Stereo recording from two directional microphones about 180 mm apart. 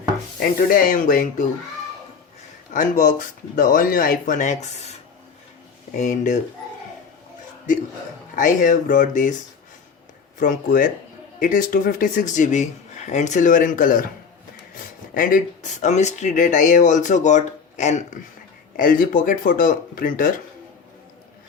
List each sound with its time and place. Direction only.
0.7 s speech: 50° left (ahead or behind)
2.7 s speech: 45° left (ahead or behind)
8.4 s speech: 45° left (ahead or behind)
10.4 s speech: 45° left (ahead or behind)
15.1 s speech: 50° left (ahead or behind)